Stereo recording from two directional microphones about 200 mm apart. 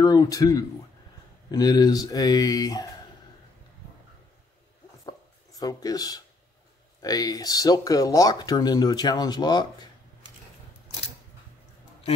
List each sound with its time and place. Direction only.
0.0 s speech: 20° left (ahead or behind)
5.0 s a sound: 20° left (ahead or behind)
7.0 s speech: 20° left (ahead or behind)